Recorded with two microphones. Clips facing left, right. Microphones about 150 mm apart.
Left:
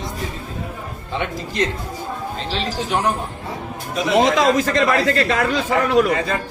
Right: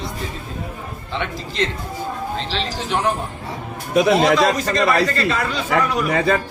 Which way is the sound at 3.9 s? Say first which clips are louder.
Right 2 dB; 65° right (ahead or behind).